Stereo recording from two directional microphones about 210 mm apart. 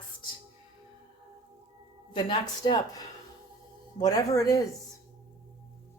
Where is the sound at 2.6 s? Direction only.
20° left (ahead or behind).